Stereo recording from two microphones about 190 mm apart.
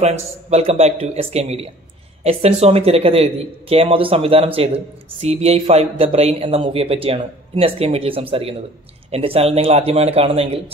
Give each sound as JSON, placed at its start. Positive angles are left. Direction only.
{"t": 0.0, "sound": "speech", "side_deg": -35}